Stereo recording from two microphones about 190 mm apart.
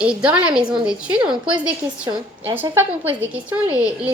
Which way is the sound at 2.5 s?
10° right (ahead or behind).